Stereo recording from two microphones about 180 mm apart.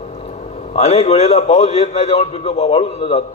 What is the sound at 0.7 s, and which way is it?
A man's voice, 35° left (ahead or behind).